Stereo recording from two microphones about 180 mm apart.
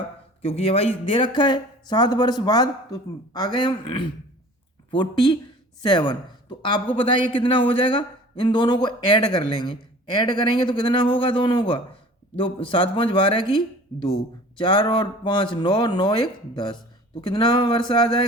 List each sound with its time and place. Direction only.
0.4 s speech: 35° left (ahead or behind)
14.6 s speech: 25° left (ahead or behind)